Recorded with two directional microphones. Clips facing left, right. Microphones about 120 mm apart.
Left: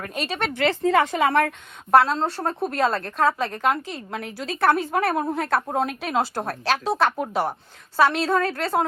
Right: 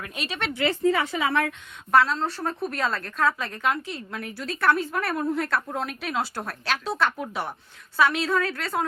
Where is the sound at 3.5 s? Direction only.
40° left (ahead or behind).